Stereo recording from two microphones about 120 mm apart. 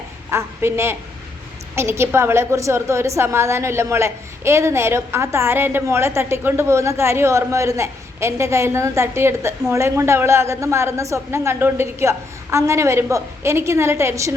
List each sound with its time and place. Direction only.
0.3 s a woman's voice: 20° right (ahead or behind)